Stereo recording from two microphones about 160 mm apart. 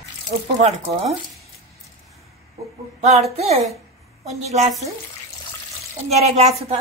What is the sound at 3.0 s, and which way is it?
A woman's voice, 45° right (ahead or behind).